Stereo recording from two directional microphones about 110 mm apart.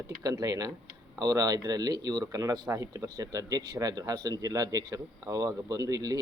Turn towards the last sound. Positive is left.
turn(degrees=-30)  # may be behind; listen again after turning